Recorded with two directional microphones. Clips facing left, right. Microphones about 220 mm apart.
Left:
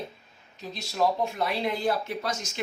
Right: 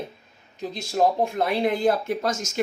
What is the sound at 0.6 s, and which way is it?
Speech, 50° right (ahead or behind).